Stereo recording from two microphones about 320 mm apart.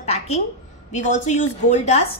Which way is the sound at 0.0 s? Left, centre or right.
Centre.